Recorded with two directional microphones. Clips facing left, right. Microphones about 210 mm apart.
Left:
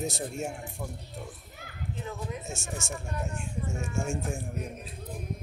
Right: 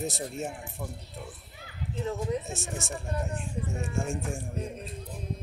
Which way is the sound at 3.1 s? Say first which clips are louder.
Right 2 dB; 35° right (ahead or behind).